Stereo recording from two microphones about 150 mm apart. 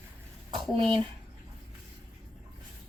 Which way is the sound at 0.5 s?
35° right (ahead or behind).